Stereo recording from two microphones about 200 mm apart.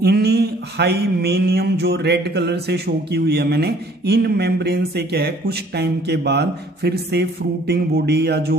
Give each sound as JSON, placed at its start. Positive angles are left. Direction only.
{"t": 0.0, "sound": "mantra", "side_deg": -55}